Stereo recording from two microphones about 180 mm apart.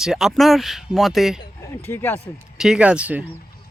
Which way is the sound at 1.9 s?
10° left (ahead or behind).